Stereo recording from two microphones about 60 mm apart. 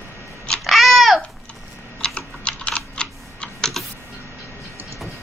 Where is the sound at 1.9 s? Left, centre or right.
Centre.